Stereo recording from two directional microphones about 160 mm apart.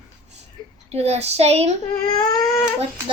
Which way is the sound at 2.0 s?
25° left (ahead or behind).